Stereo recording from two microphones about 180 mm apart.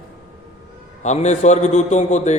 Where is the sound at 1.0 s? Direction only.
40° left (ahead or behind).